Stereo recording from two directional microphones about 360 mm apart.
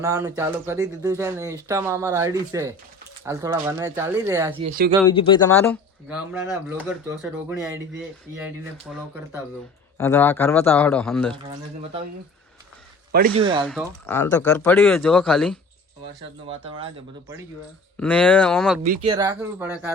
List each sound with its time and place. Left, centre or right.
0.0 s speech: centre
5.0 s speech: centre
5.6 s speech: centre
13.1 s a man's voice: right
13.7 s speech: centre
16.5 s speech: centre
18.0 s speech: centre
18.8 s speech: centre